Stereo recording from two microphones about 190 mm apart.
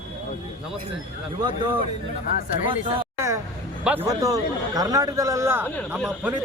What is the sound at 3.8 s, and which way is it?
A man's voice, 10° right (ahead or behind).